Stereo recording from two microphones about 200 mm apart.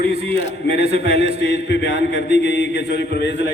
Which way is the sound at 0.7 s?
30° right (ahead or behind).